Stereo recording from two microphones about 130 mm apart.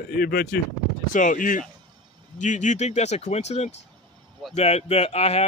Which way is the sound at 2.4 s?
70° left (ahead or behind).